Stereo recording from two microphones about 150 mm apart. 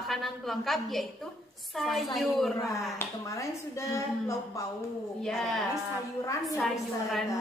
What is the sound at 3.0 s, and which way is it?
A woman's voice, 20° left (ahead or behind).